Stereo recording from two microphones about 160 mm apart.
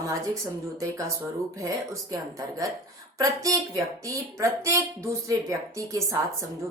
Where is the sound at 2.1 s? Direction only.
20° right (ahead or behind).